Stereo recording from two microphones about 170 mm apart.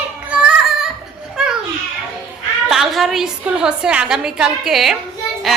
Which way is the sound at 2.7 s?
Centre (ahead or behind).